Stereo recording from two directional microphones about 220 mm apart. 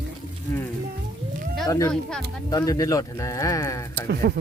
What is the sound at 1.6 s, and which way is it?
Speech, 15° left (ahead or behind).